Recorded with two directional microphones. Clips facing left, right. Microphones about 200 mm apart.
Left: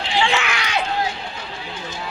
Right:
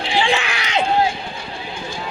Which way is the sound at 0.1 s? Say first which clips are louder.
Right 1 dB; 15° right (ahead or behind).